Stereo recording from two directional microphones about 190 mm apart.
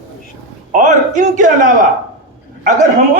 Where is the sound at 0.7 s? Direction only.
40° right (ahead or behind).